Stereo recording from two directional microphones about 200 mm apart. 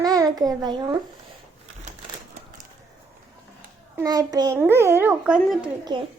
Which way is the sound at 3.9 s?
20° right (ahead or behind).